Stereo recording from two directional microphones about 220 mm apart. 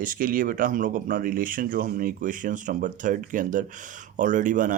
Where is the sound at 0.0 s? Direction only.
40° right (ahead or behind).